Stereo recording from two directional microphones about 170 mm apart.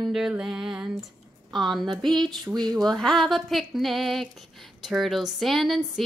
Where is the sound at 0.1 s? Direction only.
5° right (ahead or behind).